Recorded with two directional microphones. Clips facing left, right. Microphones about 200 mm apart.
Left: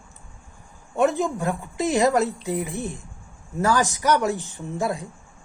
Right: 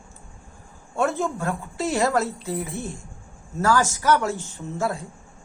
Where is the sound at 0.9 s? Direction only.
15° left (ahead or behind).